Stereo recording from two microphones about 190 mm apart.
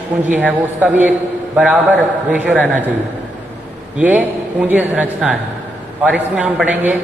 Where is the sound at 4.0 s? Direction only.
10° right (ahead or behind).